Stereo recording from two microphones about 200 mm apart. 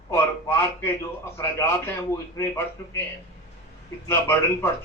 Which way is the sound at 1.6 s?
15° left (ahead or behind).